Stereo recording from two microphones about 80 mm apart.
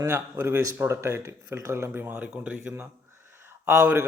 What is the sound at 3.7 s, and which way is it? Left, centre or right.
Speech, right.